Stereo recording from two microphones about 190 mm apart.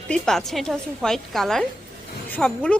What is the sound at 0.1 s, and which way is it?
A woman's voice, centre (ahead or behind).